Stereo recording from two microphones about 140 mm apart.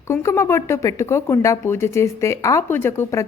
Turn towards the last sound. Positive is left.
turn(degrees=15)  # may be behind; listen again after turning